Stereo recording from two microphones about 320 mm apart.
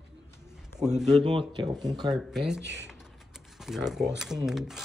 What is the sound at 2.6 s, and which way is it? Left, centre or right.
Speech, right.